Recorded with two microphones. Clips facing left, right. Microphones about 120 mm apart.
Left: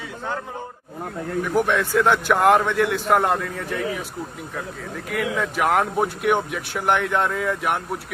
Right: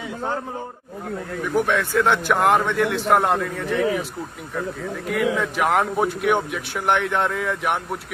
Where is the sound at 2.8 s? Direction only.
55° right (ahead or behind).